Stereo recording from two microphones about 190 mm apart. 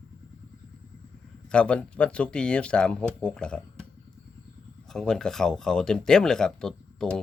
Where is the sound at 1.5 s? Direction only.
5° left (ahead or behind).